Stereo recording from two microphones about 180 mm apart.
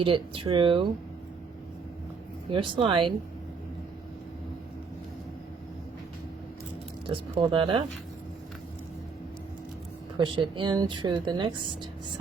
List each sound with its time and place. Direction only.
0.0 s speech: 30° right (ahead or behind)
2.5 s speech: 30° right (ahead or behind)
7.1 s speech: 30° right (ahead or behind)
10.2 s speech: 25° right (ahead or behind)